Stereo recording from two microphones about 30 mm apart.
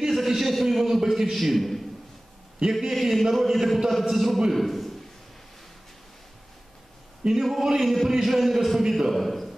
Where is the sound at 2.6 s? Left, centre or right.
Right.